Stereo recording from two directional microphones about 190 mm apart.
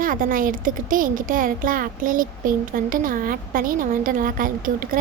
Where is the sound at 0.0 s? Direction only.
45° right (ahead or behind).